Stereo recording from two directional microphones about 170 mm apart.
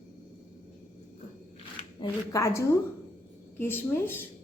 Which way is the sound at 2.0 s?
20° left (ahead or behind).